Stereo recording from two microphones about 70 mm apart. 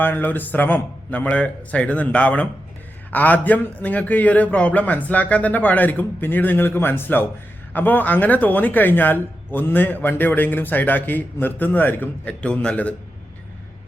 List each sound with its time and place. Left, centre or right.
0.0 s speech: left